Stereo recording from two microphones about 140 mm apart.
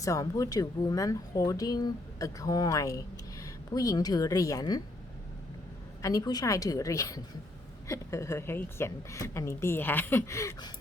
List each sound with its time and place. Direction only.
0.0 s a woman's voice: 25° left (ahead or behind)
6.0 s speech: 25° left (ahead or behind)